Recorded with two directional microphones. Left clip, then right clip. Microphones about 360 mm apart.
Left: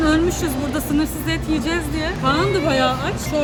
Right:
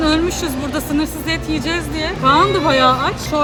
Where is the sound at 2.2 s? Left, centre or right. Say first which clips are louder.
Right 6 dB; centre.